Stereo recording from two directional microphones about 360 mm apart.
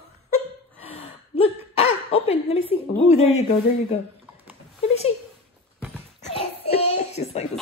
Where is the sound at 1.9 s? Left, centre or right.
Left.